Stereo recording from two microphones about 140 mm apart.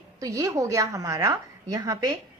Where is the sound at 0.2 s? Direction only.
25° right (ahead or behind).